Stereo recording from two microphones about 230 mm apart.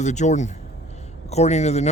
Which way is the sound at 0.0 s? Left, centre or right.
Left.